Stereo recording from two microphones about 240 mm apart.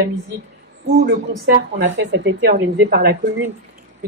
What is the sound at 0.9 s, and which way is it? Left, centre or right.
A woman's voice, right.